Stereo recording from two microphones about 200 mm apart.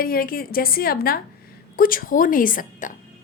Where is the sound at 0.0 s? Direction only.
45° left (ahead or behind).